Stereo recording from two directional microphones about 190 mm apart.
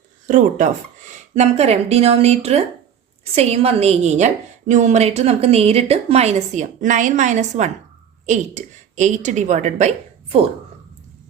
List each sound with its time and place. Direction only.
0.3 s a woman's voice: 40° right (ahead or behind)